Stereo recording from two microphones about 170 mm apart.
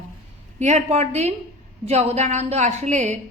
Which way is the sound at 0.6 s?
40° right (ahead or behind).